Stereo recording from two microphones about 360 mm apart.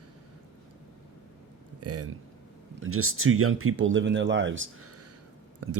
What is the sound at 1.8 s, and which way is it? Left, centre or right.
Speech, right.